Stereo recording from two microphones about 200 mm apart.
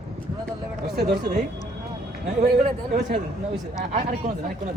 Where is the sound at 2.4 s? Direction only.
35° right (ahead or behind).